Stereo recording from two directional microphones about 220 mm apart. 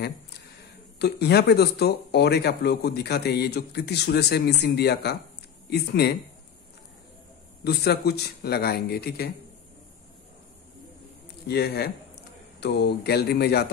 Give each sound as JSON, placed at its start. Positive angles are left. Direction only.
{"t": 0.9, "sound": "speech", "side_deg": 50}
{"t": 7.6, "sound": "speech", "side_deg": 45}
{"t": 11.4, "sound": "speech", "side_deg": 45}